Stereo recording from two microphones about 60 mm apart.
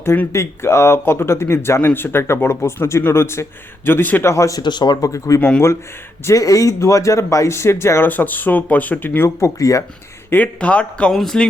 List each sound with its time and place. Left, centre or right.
0.3 s speech: left
3.8 s speech: left
4.2 s speech: left
8.0 s speech: left
9.2 s speech: left
10.2 s speech: left
10.6 s speech: left
11.1 s speech: centre